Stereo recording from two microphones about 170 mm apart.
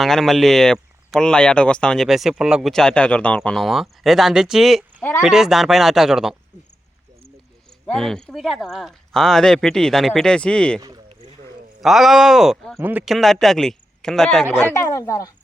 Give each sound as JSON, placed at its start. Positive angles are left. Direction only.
{"t": 0.0, "sound": "speech", "side_deg": 0}
{"t": 7.9, "sound": "speech", "side_deg": 5}
{"t": 10.8, "sound": "speech", "side_deg": -20}
{"t": 11.8, "sound": "speech", "side_deg": 0}
{"t": 14.7, "sound": "speech", "side_deg": 15}